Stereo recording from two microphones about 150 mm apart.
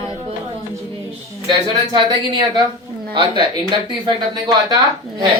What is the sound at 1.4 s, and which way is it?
Speech, 30° right (ahead or behind).